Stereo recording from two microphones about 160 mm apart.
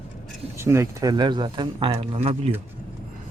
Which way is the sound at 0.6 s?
15° right (ahead or behind).